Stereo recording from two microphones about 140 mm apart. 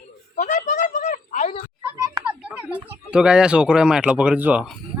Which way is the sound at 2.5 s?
10° right (ahead or behind).